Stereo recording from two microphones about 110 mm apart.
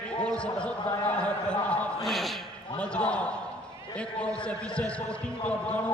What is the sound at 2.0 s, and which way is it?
A man's voice, centre (ahead or behind).